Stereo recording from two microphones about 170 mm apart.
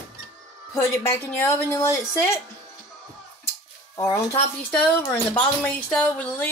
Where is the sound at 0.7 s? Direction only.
15° left (ahead or behind).